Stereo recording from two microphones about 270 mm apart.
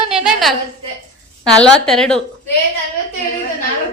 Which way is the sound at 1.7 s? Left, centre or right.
Centre.